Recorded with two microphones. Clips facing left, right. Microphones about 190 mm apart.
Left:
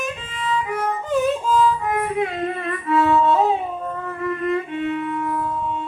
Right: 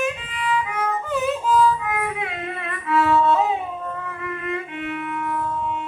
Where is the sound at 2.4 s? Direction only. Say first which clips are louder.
Left 6 dB; 40° left (ahead or behind).